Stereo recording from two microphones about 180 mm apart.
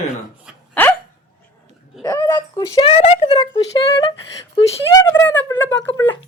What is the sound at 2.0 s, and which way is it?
Speech, 20° left (ahead or behind).